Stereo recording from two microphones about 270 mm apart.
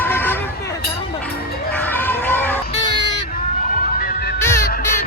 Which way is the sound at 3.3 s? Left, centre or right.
Left.